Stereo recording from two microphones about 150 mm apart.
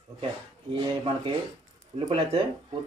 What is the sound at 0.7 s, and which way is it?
Speech, 30° right (ahead or behind).